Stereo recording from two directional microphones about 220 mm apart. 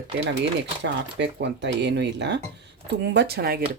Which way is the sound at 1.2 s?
50° right (ahead or behind).